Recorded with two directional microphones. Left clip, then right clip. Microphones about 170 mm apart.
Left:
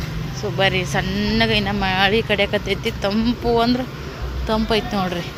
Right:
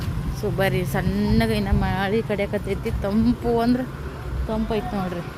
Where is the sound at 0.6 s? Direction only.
25° right (ahead or behind).